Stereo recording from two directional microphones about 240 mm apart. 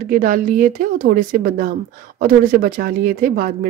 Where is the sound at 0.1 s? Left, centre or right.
Right.